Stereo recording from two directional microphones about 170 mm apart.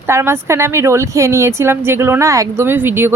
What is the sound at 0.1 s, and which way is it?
Speech, 15° right (ahead or behind).